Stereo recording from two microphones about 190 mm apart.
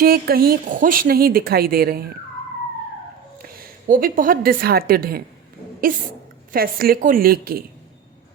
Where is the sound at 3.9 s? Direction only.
45° right (ahead or behind).